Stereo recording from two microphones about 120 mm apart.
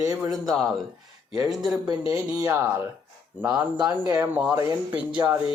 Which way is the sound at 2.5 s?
15° right (ahead or behind).